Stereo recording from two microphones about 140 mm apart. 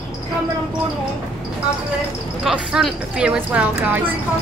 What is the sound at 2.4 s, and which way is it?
Speech, 5° right (ahead or behind).